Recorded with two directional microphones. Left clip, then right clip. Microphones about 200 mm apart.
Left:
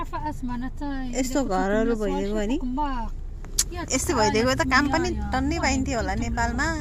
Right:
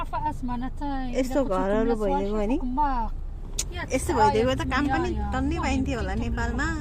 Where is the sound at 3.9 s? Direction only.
25° left (ahead or behind).